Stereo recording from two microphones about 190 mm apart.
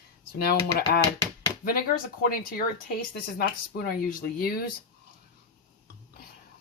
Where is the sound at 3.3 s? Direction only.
50° left (ahead or behind).